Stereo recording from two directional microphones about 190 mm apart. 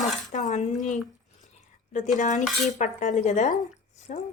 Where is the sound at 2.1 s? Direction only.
40° left (ahead or behind).